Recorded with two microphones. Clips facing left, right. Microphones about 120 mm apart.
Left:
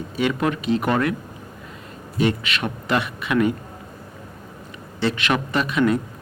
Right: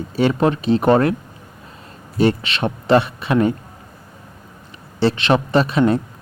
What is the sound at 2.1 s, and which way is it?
A man's voice, 30° right (ahead or behind).